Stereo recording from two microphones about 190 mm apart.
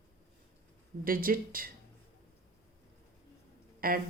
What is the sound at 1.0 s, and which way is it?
Speech, 50° right (ahead or behind).